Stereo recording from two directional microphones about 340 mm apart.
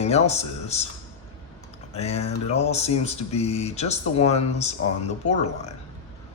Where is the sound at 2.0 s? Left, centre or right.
Centre.